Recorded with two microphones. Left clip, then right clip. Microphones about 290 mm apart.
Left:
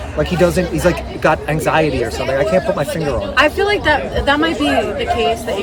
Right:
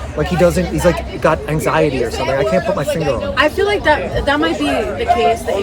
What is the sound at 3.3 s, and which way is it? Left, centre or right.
Speech, centre.